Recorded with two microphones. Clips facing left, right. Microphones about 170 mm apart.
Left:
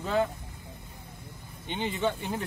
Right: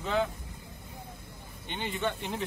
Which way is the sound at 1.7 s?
10° left (ahead or behind).